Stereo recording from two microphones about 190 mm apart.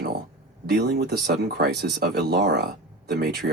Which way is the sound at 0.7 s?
60° right (ahead or behind).